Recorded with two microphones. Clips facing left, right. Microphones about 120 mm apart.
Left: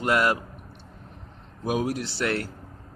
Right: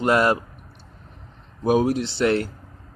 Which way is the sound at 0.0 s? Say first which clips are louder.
Right 4 dB; 30° right (ahead or behind).